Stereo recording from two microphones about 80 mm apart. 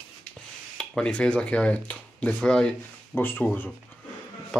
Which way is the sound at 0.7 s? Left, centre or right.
Centre.